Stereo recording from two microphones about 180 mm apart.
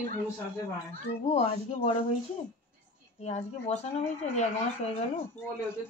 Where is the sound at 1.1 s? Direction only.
35° left (ahead or behind).